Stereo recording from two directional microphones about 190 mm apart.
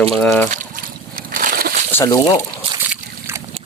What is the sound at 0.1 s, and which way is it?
Speech, 5° left (ahead or behind).